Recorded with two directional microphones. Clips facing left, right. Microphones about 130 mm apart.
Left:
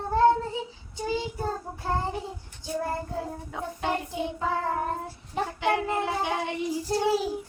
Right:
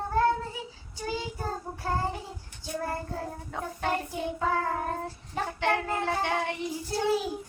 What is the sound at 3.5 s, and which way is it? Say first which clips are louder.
Speech: even; 5° left (ahead or behind).